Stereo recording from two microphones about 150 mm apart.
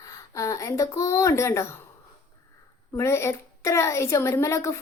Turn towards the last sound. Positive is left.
turn(degrees=20)  # may be behind; listen again after turning